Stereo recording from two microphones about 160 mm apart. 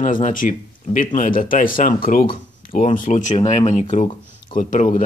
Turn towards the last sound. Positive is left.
turn(degrees=55)  # may be behind; listen again after turning